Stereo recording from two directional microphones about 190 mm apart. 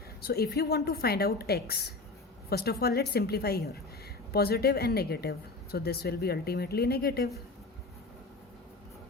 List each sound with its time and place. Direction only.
0.2 s speech: 55° left (ahead or behind)